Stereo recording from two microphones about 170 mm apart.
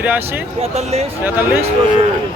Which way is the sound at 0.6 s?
40° right (ahead or behind).